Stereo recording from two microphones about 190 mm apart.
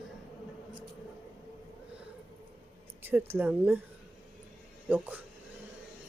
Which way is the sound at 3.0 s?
10° right (ahead or behind).